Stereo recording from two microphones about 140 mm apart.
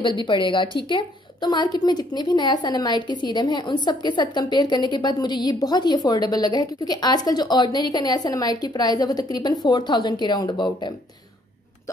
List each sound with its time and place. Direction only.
0.0 s a woman's voice: 35° left (ahead or behind)